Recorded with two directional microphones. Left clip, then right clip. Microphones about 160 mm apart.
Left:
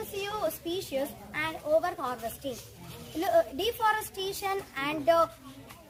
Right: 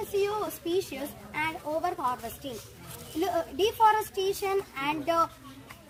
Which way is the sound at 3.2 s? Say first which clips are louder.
Left 2 dB; 30° left (ahead or behind).